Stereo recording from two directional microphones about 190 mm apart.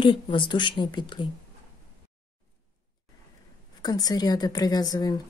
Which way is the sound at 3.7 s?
20° left (ahead or behind).